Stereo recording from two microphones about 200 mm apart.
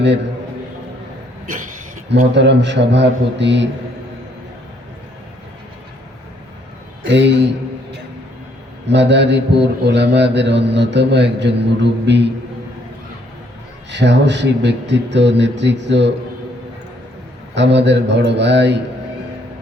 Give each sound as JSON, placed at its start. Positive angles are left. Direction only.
{"t": 2.0, "sound": "mantra", "side_deg": -60}
{"t": 7.0, "sound": "mantra", "side_deg": -60}
{"t": 8.9, "sound": "mantra", "side_deg": -60}
{"t": 13.9, "sound": "mantra", "side_deg": -60}
{"t": 17.5, "sound": "mantra", "side_deg": -60}